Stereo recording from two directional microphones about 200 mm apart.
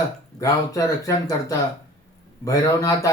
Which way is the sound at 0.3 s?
15° left (ahead or behind).